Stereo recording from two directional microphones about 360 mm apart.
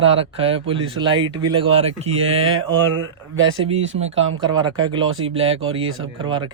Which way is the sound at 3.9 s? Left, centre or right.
Centre.